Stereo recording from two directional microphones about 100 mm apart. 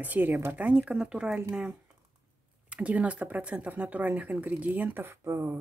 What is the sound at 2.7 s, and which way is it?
Speech, 15° right (ahead or behind).